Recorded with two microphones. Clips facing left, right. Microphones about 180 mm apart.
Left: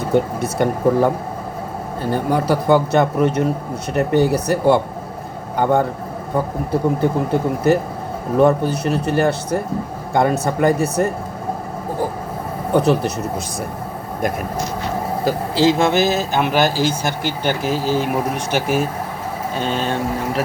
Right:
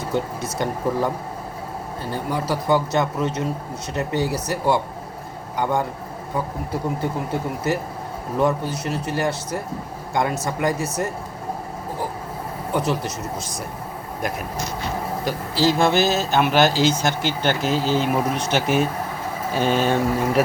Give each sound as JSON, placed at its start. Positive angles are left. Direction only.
{"t": 0.1, "sound": "speech", "side_deg": 60}
{"t": 12.7, "sound": "speech", "side_deg": 60}
{"t": 15.5, "sound": "speech", "side_deg": 20}
{"t": 19.5, "sound": "speech", "side_deg": -10}